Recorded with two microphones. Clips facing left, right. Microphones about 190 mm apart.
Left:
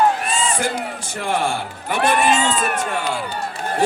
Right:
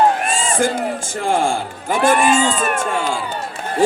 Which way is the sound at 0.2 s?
50° right (ahead or behind).